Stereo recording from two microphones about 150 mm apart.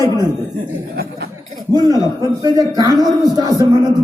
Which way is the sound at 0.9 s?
90° right.